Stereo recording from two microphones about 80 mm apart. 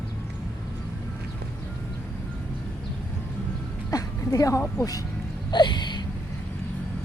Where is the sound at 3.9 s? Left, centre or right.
Left.